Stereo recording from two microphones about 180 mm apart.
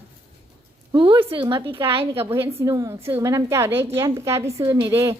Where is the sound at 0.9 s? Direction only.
30° right (ahead or behind).